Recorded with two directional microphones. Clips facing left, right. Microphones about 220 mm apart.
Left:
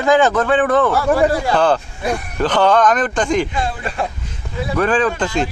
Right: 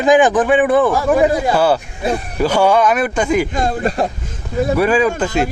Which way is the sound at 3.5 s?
40° right (ahead or behind).